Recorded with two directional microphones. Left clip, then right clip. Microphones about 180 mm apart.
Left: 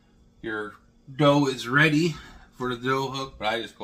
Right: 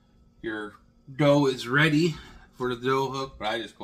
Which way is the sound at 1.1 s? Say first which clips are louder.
Left 1 dB; 15° left (ahead or behind).